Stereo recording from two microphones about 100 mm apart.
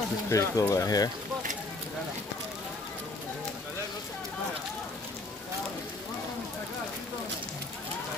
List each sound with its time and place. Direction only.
0.3 s speech: 30° left (ahead or behind)